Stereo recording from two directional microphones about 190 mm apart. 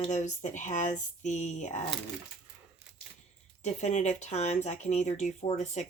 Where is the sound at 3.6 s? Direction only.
35° left (ahead or behind).